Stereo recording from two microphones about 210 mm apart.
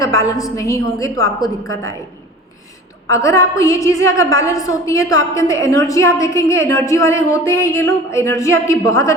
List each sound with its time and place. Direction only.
0.0 s a woman's voice: 15° left (ahead or behind)
3.1 s a woman's voice: 15° left (ahead or behind)